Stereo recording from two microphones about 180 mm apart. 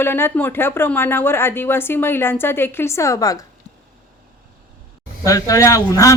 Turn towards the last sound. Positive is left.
turn(degrees=20)  # may be behind; listen again after turning